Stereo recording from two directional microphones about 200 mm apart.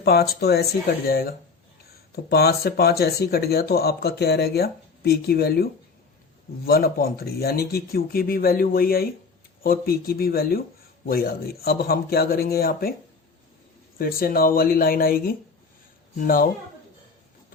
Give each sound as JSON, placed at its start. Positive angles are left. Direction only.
{"t": 0.0, "sound": "speech", "side_deg": 50}
{"t": 6.7, "sound": "speech", "side_deg": 50}
{"t": 14.0, "sound": "speech", "side_deg": 45}